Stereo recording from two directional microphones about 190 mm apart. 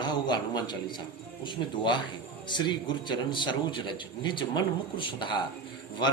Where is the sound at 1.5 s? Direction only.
25° left (ahead or behind).